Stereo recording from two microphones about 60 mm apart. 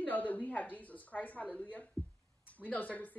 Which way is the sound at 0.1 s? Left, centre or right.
Left.